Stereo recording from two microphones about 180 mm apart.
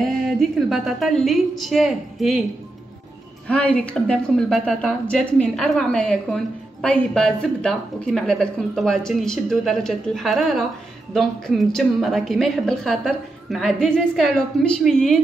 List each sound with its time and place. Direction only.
0.0 s a woman's voice: centre (ahead or behind)
3.4 s a woman's voice: 5° left (ahead or behind)